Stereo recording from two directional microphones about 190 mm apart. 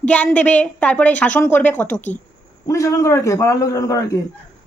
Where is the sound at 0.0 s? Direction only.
5° left (ahead or behind).